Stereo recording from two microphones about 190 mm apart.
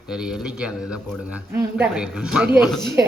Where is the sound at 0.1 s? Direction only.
5° right (ahead or behind).